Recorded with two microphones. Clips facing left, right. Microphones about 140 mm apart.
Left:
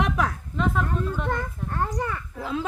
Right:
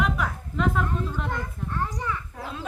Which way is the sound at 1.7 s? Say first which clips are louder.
Left 2 dB; 55° left (ahead or behind).